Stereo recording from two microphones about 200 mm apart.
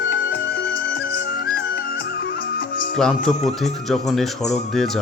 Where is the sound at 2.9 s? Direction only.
5° left (ahead or behind).